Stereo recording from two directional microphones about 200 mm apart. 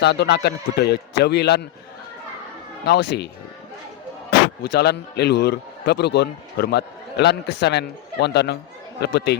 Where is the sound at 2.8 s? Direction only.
55° left (ahead or behind).